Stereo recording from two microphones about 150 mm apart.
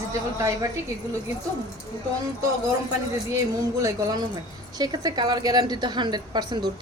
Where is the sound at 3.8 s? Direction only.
20° right (ahead or behind).